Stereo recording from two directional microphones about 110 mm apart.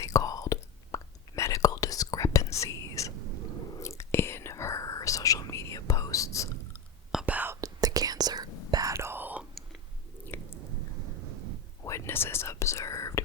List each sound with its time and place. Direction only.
0.0 s whispering: 30° left (ahead or behind)
7.1 s whispering: 5° right (ahead or behind)
7.3 s whispering: 20° right (ahead or behind)
7.6 s whispering: 35° right (ahead or behind); by 9.5 s 15° right (ahead or behind)
10.3 s chewing: 20° left (ahead or behind)
11.9 s whispering: 25° left (ahead or behind)